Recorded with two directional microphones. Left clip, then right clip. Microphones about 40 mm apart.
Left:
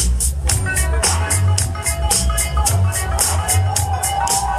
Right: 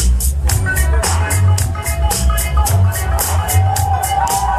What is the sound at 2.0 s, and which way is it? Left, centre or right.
Music, centre.